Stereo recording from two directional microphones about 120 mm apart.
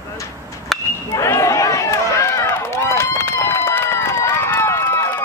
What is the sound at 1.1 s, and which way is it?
Run, 25° left (ahead or behind).